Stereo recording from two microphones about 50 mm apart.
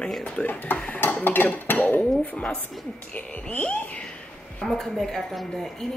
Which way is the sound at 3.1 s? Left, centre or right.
Left.